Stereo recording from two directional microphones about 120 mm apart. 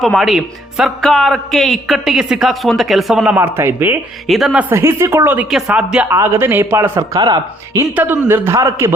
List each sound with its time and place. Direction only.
0.0 s speech: centre (ahead or behind)
3.2 s a man's voice: 20° right (ahead or behind)
4.3 s speech: centre (ahead or behind)
4.7 s a man's voice: 20° right (ahead or behind)
5.5 s a man's voice: 5° right (ahead or behind); by 7.2 s 20° right (ahead or behind)
7.2 s speech: 35° right (ahead or behind)
7.9 s a man's voice: 15° right (ahead or behind)